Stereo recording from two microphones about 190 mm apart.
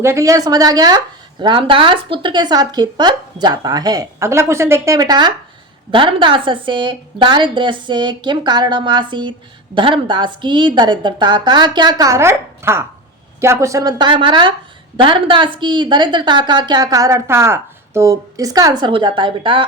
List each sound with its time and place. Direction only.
0.0 s speech: 15° right (ahead or behind)